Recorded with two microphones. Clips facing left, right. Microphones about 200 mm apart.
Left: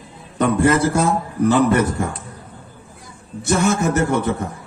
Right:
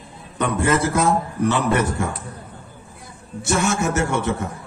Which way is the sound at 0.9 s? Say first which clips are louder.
Left 1 dB; 30° left (ahead or behind).